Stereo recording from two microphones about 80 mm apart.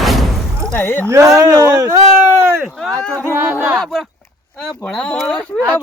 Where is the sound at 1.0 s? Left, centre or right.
Right.